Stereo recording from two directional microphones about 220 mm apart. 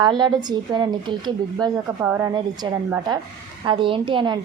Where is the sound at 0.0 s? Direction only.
20° right (ahead or behind).